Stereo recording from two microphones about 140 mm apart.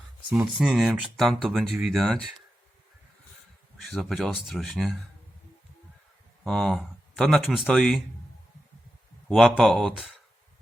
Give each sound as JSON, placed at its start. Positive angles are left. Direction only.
{"t": 0.3, "sound": "speech", "side_deg": -5}
{"t": 3.8, "sound": "speech", "side_deg": 0}
{"t": 6.4, "sound": "speech", "side_deg": 5}
{"t": 9.3, "sound": "speech", "side_deg": 5}